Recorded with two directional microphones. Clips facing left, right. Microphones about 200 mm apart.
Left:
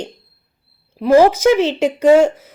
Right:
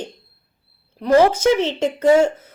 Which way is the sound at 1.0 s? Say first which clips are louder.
Left 3 dB; 10° left (ahead or behind).